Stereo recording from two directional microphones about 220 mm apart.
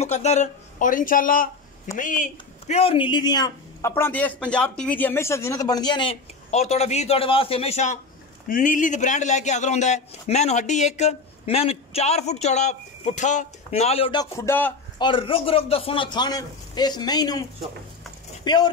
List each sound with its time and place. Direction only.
0.0 s a man's voice: 30° left (ahead or behind)
14.3 s a man's voice: 10° left (ahead or behind)
15.0 s speech: 20° left (ahead or behind)